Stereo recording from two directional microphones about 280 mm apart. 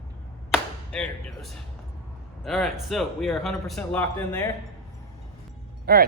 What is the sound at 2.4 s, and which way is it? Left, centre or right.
A man's voice, centre.